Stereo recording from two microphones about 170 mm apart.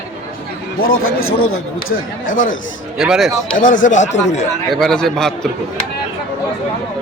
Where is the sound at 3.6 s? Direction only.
50° left (ahead or behind).